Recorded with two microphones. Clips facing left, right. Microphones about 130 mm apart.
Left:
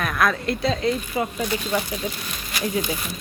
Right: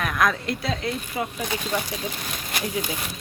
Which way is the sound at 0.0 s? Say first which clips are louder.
Left 1 dB; 15° right (ahead or behind).